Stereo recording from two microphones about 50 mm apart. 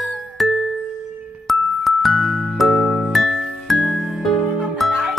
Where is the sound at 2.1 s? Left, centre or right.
Centre.